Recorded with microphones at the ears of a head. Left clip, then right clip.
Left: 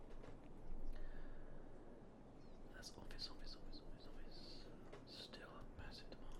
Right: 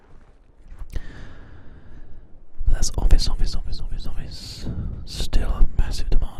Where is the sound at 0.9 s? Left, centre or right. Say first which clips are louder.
Right 17 dB; right.